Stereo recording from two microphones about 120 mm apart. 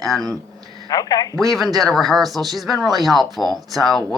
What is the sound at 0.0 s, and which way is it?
Speech, centre (ahead or behind).